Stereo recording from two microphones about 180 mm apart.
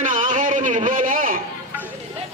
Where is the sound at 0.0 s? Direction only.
45° right (ahead or behind).